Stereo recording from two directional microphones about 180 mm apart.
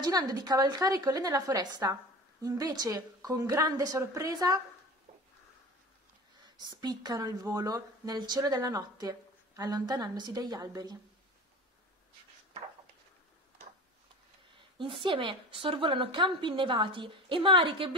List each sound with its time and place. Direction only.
0.0 s speech: 20° right (ahead or behind)
6.6 s speech: 25° right (ahead or behind)
14.8 s speech: 30° right (ahead or behind)